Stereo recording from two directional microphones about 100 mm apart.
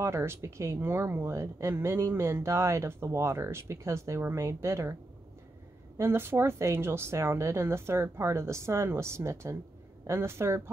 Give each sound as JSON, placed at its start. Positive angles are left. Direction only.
{"t": 0.0, "sound": "speech", "side_deg": -25}
{"t": 5.9, "sound": "speech", "side_deg": -25}